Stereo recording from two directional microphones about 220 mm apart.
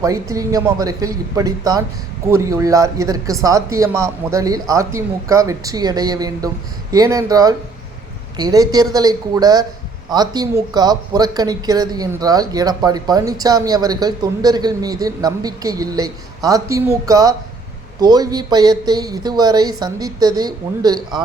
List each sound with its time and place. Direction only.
0.0 s speech: 15° right (ahead or behind)